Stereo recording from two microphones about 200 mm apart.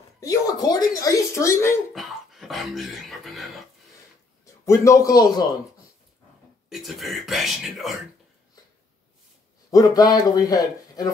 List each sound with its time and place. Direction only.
0.2 s speech: 20° left (ahead or behind)
2.0 s speech: centre (ahead or behind)
4.6 s speech: 15° left (ahead or behind)
6.7 s speech: centre (ahead or behind)
9.7 s speech: 15° left (ahead or behind)